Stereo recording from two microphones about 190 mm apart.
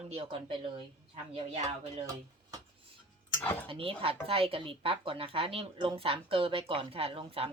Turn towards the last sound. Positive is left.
turn(degrees=-30)  # may be behind; listen again after turning